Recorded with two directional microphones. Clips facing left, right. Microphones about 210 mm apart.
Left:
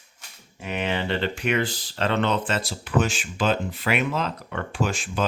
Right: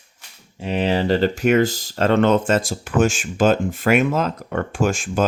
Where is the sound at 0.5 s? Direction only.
30° right (ahead or behind).